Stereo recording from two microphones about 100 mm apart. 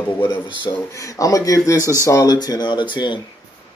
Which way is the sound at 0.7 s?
35° left (ahead or behind).